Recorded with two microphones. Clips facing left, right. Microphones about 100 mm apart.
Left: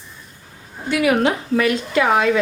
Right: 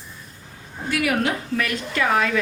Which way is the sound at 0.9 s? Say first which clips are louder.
Left 5 dB; 25° left (ahead or behind).